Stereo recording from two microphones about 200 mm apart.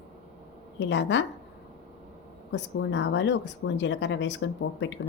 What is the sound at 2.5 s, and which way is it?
Speech, 65° left (ahead or behind).